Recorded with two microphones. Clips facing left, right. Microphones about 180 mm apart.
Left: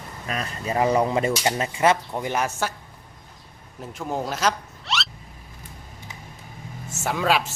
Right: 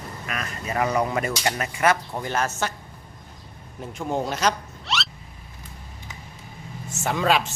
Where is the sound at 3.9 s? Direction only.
5° left (ahead or behind).